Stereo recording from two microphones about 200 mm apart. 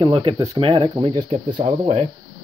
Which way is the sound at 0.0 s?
25° right (ahead or behind).